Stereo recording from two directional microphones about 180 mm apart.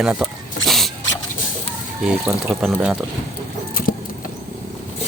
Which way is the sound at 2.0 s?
5° right (ahead or behind).